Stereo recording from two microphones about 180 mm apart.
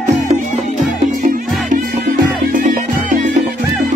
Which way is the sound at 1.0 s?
40° right (ahead or behind).